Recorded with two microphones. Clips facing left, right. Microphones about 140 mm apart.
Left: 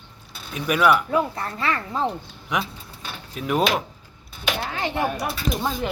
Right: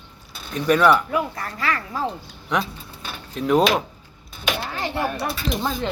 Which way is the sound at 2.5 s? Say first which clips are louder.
Right 2 dB; 10° left (ahead or behind).